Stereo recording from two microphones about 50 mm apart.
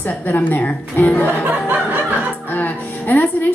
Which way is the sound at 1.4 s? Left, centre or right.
Right.